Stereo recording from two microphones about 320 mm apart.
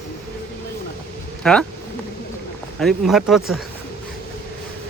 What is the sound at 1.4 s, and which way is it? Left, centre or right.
Speech, centre.